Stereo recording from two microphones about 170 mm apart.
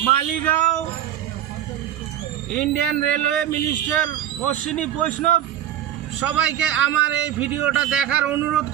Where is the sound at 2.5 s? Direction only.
5° left (ahead or behind).